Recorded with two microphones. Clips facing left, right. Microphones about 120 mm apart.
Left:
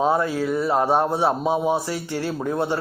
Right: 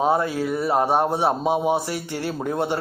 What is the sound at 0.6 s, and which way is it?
Speech, 15° right (ahead or behind).